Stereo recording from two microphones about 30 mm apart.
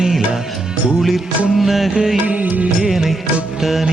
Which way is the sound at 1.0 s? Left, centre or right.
Centre.